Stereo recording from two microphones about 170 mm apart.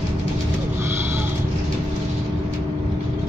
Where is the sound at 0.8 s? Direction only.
15° right (ahead or behind).